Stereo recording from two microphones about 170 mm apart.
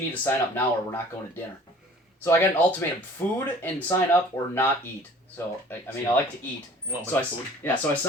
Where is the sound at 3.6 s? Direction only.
15° left (ahead or behind).